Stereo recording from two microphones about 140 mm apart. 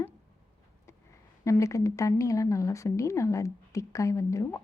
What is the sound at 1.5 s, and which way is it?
Speech, 20° left (ahead or behind).